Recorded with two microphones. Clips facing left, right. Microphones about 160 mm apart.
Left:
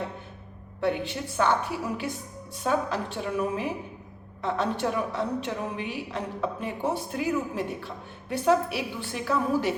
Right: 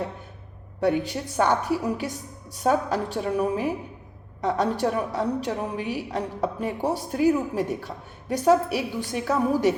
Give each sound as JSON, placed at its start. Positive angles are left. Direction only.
{"t": 0.9, "sound": "a woman's voice", "side_deg": -40}
{"t": 4.8, "sound": "a woman's voice", "side_deg": -40}